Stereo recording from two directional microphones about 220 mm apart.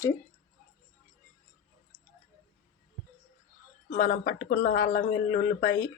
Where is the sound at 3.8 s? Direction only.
40° left (ahead or behind).